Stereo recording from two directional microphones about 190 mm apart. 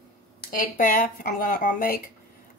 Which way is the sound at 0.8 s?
45° left (ahead or behind).